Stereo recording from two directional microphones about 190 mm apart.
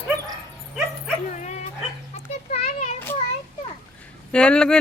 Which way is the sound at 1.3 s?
40° left (ahead or behind).